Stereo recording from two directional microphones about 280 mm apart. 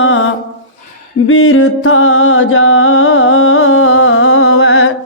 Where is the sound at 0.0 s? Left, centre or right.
Left.